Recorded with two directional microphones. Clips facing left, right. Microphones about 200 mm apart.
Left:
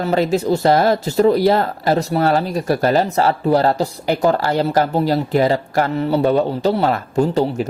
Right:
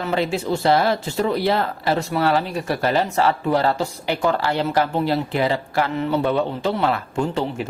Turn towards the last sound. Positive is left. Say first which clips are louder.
# left 6 dB
turn(degrees=40)  # may be behind; listen again after turning